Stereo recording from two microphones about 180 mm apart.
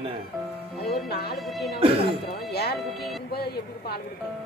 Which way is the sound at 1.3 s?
Centre (ahead or behind).